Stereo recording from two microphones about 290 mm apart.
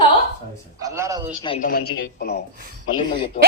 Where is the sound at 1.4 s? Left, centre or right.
Centre.